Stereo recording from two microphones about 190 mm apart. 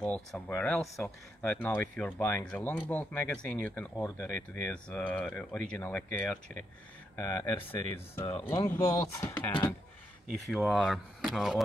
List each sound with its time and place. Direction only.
0.0 s speech: 5° left (ahead or behind)
10.4 s speech: centre (ahead or behind)